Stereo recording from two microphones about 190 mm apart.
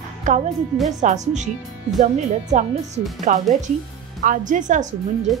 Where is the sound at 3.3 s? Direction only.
40° right (ahead or behind).